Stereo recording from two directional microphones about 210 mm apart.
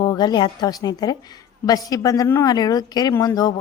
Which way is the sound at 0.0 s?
20° left (ahead or behind).